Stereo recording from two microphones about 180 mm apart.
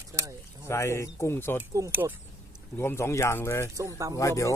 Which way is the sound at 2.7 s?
15° left (ahead or behind).